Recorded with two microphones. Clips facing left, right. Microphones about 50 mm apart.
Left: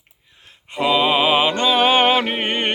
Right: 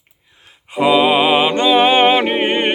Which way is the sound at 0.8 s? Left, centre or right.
Centre.